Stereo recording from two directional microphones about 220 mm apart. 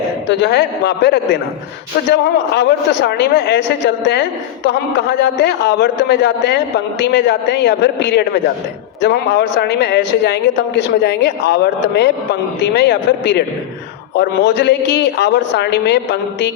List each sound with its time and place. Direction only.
0.3 s a man's voice: 50° left (ahead or behind)